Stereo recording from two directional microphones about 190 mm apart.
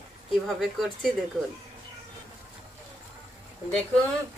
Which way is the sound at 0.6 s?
Centre (ahead or behind).